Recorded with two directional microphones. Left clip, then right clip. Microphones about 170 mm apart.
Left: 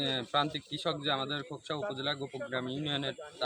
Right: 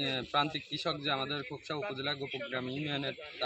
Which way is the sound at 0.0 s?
15° left (ahead or behind).